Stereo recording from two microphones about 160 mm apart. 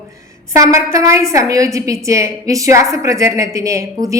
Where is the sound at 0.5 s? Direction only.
20° right (ahead or behind).